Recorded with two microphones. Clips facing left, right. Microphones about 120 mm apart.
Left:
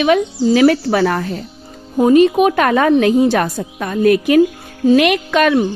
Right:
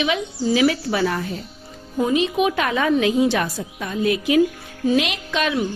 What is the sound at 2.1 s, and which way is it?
A woman's voice, 50° left (ahead or behind).